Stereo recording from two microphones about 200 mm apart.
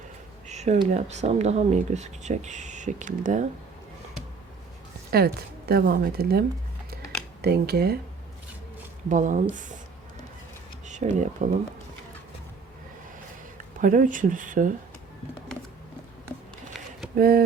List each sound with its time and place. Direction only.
0.4 s a sound: 35° right (ahead or behind)
0.9 s speech: 35° right (ahead or behind)
5.1 s speech: 50° right (ahead or behind)
7.4 s speech: 50° right (ahead or behind)
9.0 s speech: 40° right (ahead or behind)
10.8 s speech: 35° right (ahead or behind)
13.7 s speech: 40° right (ahead or behind)
17.2 s speech: 50° right (ahead or behind)